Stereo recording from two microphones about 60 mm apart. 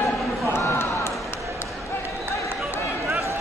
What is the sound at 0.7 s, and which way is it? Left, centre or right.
Basketball bounce, left.